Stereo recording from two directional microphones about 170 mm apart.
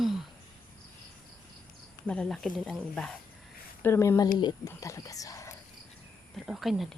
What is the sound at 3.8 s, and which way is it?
Speech, 15° left (ahead or behind).